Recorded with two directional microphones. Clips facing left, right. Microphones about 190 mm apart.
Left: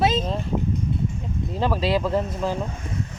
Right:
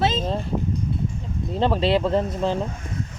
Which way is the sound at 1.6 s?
25° right (ahead or behind).